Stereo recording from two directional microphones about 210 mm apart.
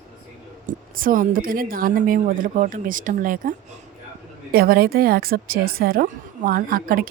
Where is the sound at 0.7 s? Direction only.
40° right (ahead or behind).